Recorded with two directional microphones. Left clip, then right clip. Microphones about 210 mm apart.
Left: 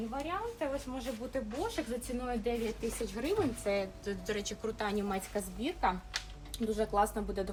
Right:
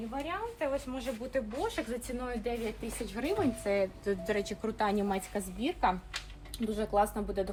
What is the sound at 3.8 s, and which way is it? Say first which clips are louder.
Speech: right 6 dB; 40° right (ahead or behind).